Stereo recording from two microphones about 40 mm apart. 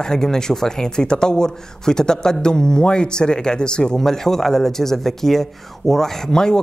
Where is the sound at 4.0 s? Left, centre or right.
Centre.